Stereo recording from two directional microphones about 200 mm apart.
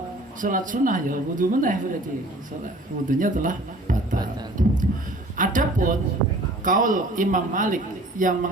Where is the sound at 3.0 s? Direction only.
40° right (ahead or behind).